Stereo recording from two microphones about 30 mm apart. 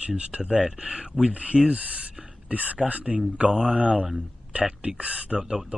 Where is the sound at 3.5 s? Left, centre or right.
Right.